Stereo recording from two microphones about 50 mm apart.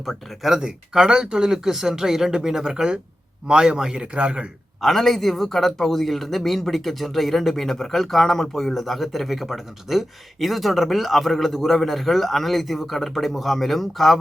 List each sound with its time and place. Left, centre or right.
0.0 s speech: centre
0.6 s speech: centre
4.8 s speech: centre